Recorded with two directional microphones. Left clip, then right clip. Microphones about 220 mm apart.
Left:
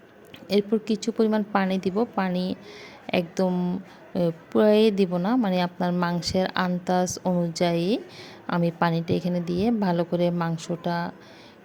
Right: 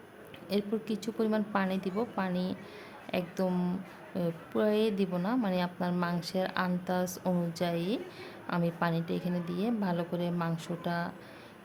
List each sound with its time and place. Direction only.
0.4 s a woman's voice: 25° left (ahead or behind)